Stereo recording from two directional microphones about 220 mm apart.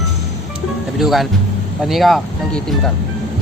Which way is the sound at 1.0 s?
Centre (ahead or behind).